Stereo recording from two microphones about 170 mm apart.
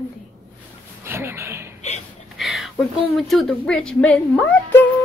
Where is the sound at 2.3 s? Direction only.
Centre (ahead or behind).